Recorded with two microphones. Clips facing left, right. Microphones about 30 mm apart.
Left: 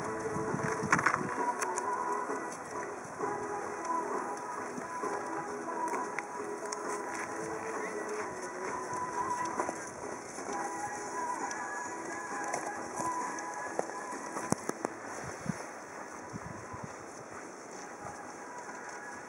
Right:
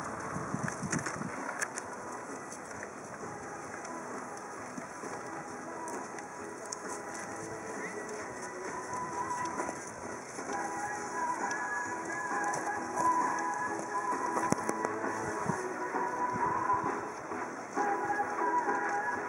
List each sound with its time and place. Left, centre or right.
0.7 s a sound: left
8.9 s music: centre
18.6 s music: centre